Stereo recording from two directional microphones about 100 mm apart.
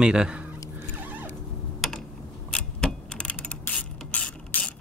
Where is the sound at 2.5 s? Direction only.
10° left (ahead or behind).